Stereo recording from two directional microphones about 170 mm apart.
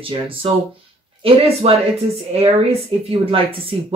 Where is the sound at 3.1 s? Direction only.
30° right (ahead or behind).